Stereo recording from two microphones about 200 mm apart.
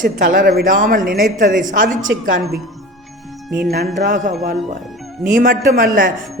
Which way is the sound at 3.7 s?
45° right (ahead or behind).